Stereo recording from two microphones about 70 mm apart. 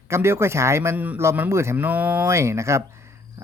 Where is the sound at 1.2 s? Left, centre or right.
Right.